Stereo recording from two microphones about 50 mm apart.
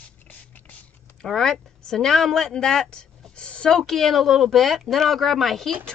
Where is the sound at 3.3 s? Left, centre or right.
Centre.